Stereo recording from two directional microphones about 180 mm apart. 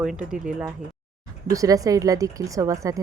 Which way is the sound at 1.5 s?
20° right (ahead or behind).